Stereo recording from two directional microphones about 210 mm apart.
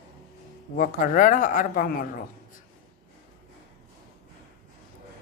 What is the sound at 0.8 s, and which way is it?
A woman's voice, 40° left (ahead or behind).